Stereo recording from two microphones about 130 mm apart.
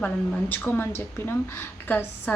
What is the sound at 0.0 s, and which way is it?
A woman's voice, 15° left (ahead or behind).